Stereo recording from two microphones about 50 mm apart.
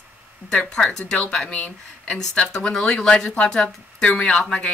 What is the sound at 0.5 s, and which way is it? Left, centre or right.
Speech, centre.